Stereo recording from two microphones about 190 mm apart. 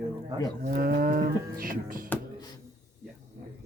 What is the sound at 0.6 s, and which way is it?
Cattle, 50° right (ahead or behind).